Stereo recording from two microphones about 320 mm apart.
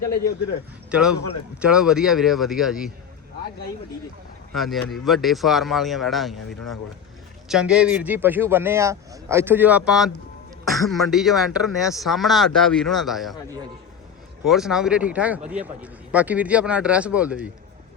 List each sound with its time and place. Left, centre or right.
0.9 s speech: centre
4.5 s speech: centre
14.4 s speech: centre